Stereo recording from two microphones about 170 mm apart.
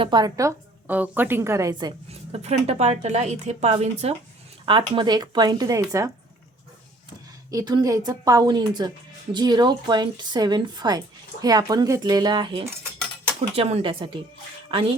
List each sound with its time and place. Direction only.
0.0 s a woman's voice: 25° right (ahead or behind)
2.3 s a woman's voice: 40° right (ahead or behind); by 6.1 s 20° right (ahead or behind)
7.5 s a woman's voice: 20° right (ahead or behind)
13.5 s a woman's voice: 40° right (ahead or behind)